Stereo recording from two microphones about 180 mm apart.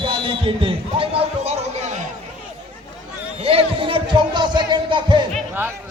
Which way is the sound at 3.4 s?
30° right (ahead or behind).